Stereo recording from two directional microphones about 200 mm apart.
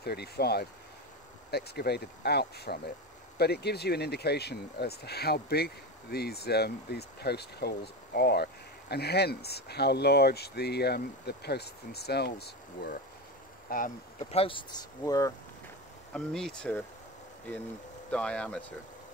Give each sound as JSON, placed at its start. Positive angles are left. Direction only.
{"t": 0.0, "sound": "speech", "side_deg": 55}
{"t": 13.7, "sound": "speech", "side_deg": 40}
{"t": 14.3, "sound": "speech", "side_deg": 25}
{"t": 16.1, "sound": "speech", "side_deg": 5}
{"t": 18.1, "sound": "speech", "side_deg": 5}